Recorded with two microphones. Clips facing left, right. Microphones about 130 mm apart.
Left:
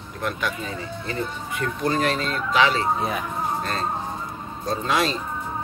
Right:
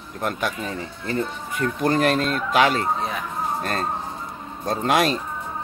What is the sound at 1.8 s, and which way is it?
A man's voice, 50° right (ahead or behind).